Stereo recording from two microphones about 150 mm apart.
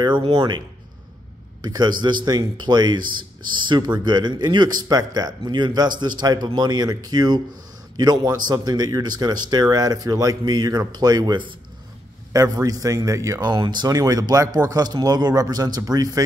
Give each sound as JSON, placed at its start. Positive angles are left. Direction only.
{"t": 0.0, "sound": "speech", "side_deg": -35}